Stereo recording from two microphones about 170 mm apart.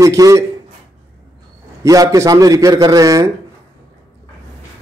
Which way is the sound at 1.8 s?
20° right (ahead or behind).